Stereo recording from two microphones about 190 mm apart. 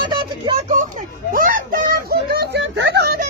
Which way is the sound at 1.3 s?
50° right (ahead or behind).